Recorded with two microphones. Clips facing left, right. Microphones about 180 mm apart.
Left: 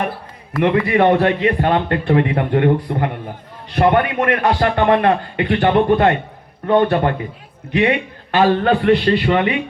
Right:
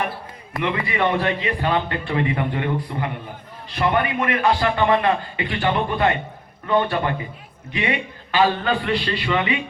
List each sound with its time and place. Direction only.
0.6 s a man's voice: 55° left (ahead or behind)